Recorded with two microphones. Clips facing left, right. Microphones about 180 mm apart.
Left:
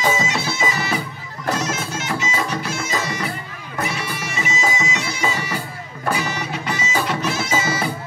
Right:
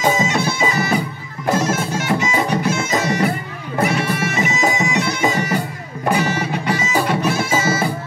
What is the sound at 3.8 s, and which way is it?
Bagpipes, 55° right (ahead or behind).